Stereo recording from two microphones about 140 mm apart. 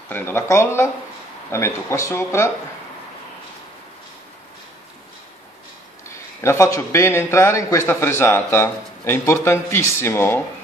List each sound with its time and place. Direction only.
0.1 s a man's voice: 15° left (ahead or behind)
6.4 s a man's voice: 20° left (ahead or behind)